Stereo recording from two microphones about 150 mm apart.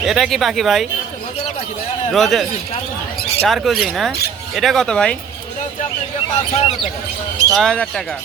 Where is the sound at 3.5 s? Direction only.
Centre (ahead or behind).